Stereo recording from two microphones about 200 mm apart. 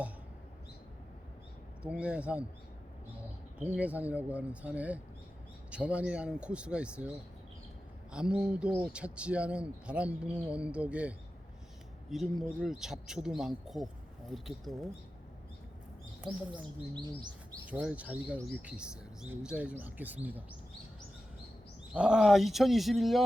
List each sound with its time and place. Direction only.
1.8 s speech: 5° right (ahead or behind)
3.6 s speech: 5° right (ahead or behind)
8.1 s speech: 5° right (ahead or behind)
12.1 s speech: centre (ahead or behind)
16.9 s bird: 20° right (ahead or behind)
17.7 s speech: 5° right (ahead or behind)
21.9 s speech: 5° right (ahead or behind)